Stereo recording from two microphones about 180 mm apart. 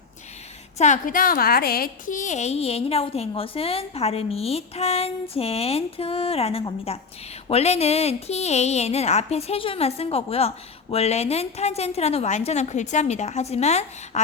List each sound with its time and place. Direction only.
0.8 s a woman's voice: 45° left (ahead or behind)